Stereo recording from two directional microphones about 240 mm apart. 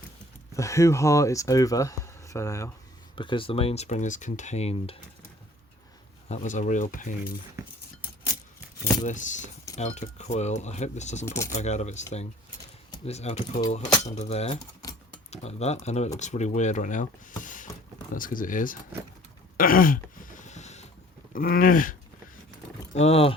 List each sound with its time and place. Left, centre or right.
0.5 s speech: centre
6.2 s speech: left
9.0 s speech: left
13.1 s speech: left
19.5 s a sound: left
21.3 s speech: left
23.0 s speech: left